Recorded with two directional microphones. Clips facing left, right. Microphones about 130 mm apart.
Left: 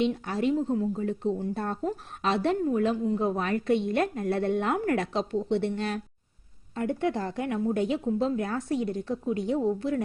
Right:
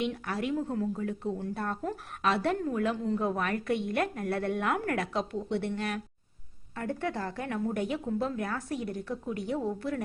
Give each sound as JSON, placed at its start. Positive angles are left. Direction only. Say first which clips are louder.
{"t": 0.0, "sound": "a woman's voice", "louder": "left 6 dB", "side_deg": 25}
{"t": 1.0, "sound": "a woman's voice", "louder": "left 5 dB", "side_deg": 25}